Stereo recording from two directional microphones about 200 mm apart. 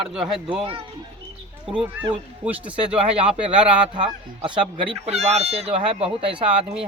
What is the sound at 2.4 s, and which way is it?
Speech, 5° right (ahead or behind).